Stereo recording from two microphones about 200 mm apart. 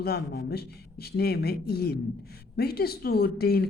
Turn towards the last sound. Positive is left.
turn(degrees=50)  # may be behind; listen again after turning